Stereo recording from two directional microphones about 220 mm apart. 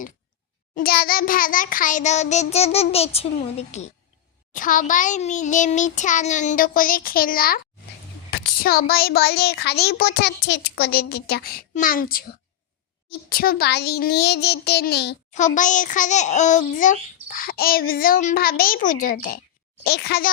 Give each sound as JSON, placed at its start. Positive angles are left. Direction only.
{"t": 0.8, "sound": "a child's voice", "side_deg": 45}
{"t": 8.3, "sound": "a sound", "side_deg": 45}
{"t": 8.9, "sound": "a child's voice", "side_deg": 45}
{"t": 15.3, "sound": "a child's voice", "side_deg": 35}